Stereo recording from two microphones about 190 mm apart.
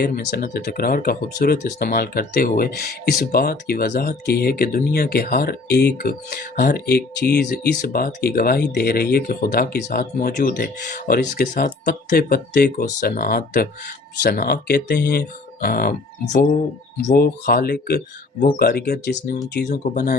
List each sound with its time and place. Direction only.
0.0 s speech: 55° left (ahead or behind)